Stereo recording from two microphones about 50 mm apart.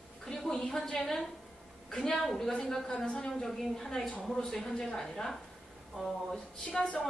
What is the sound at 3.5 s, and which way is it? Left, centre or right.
A woman's voice, centre.